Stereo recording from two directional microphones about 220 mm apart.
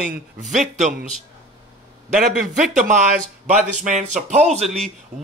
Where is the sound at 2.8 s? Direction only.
35° right (ahead or behind).